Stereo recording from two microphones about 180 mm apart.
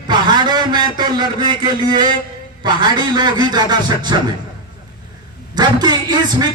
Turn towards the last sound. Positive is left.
turn(degrees=-25)  # may be behind; listen again after turning